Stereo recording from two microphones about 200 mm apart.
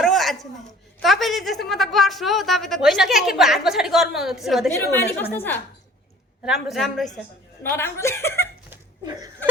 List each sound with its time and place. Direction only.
0.0 s a sound: centre (ahead or behind)
0.9 s a woman's voice: centre (ahead or behind)
4.7 s speech: 10° left (ahead or behind)
6.4 s a woman's voice: centre (ahead or behind)
7.6 s speech: 10° left (ahead or behind)
9.0 s a sound: 20° right (ahead or behind)